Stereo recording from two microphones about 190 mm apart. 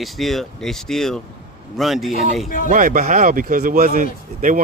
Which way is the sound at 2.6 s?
45° right (ahead or behind).